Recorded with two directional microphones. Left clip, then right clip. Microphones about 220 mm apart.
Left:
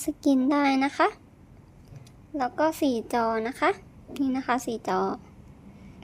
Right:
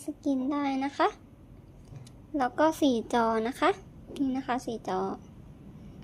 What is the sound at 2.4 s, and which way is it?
A woman's voice, centre (ahead or behind).